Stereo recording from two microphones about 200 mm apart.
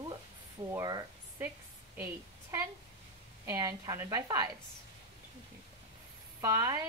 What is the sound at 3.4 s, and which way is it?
A woman's voice, 15° right (ahead or behind).